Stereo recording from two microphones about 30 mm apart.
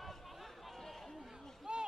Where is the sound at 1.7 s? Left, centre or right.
Right.